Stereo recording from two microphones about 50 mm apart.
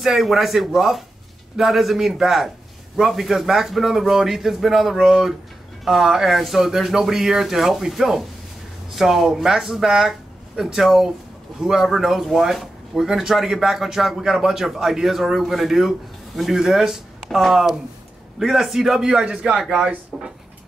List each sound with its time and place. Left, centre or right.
0.0 s speech: centre
19.1 s a man's voice: right